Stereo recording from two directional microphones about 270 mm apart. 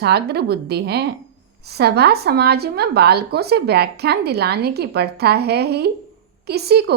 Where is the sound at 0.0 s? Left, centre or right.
Right.